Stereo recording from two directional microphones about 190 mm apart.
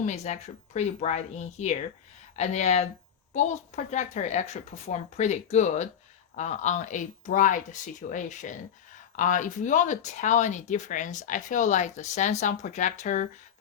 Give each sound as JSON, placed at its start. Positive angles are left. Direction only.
{"t": 0.0, "sound": "speech", "side_deg": 35}